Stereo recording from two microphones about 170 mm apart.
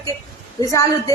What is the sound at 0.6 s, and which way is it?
Speech, 20° left (ahead or behind).